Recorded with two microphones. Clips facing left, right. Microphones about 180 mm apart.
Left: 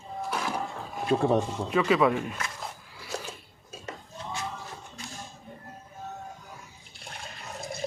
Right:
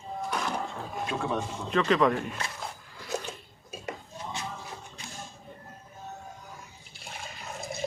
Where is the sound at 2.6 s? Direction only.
5° left (ahead or behind).